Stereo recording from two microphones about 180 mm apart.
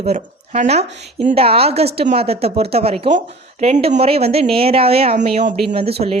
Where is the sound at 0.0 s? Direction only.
35° right (ahead or behind).